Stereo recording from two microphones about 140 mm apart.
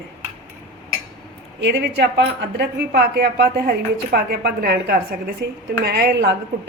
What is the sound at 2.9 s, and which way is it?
A woman's voice, 90° right.